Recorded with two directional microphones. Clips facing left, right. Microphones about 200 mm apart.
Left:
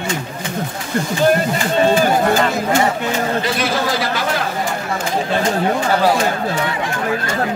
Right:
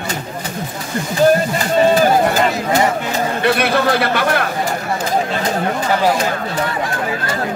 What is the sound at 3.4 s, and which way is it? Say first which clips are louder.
A man's voice: right 4 dB; 60° right (ahead or behind).